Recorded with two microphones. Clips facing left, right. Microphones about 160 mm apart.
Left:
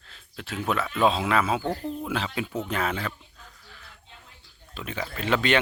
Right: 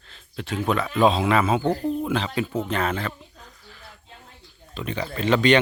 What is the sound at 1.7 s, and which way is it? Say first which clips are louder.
Speech: right 6 dB; 20° right (ahead or behind).